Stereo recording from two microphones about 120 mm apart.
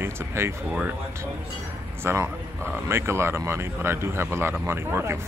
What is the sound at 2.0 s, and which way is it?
Speech, 20° right (ahead or behind).